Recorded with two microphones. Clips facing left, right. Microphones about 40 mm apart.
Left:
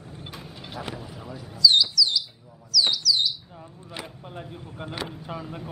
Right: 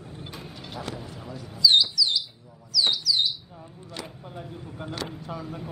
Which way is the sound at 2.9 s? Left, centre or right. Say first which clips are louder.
Left 2 dB; centre.